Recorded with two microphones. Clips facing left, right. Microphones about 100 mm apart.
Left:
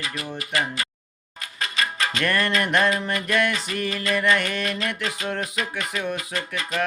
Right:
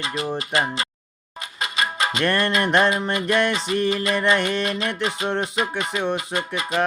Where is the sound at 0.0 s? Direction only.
25° right (ahead or behind).